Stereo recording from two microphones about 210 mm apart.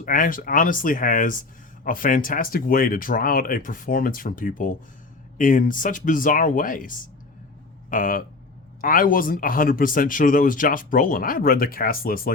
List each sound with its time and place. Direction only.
0.0 s speech: 40° left (ahead or behind)